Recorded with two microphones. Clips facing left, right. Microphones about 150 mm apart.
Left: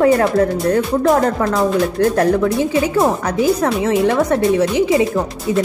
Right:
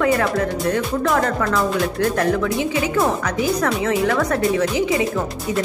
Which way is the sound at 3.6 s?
25° left (ahead or behind).